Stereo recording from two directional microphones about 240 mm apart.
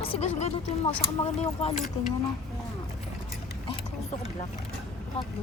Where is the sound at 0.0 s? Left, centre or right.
Left.